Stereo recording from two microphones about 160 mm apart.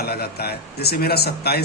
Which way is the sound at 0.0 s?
75° left (ahead or behind).